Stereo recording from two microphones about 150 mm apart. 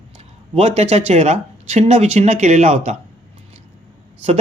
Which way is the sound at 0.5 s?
45° right (ahead or behind).